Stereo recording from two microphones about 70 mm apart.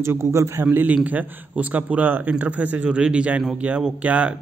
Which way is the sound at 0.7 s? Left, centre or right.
Right.